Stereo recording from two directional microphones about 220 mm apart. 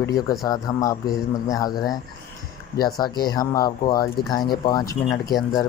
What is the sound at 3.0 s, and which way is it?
Speech, 20° left (ahead or behind).